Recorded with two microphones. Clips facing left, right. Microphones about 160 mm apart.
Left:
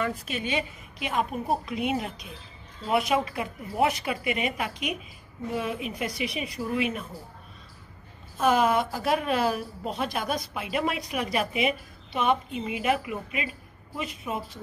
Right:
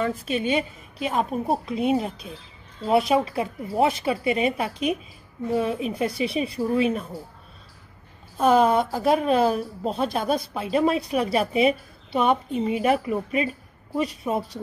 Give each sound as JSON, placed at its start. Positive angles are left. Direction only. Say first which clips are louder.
{"t": 0.0, "sound": "speech", "louder": "right 5 dB", "side_deg": -30}
{"t": 8.4, "sound": "speech", "louder": "right 4 dB", "side_deg": -35}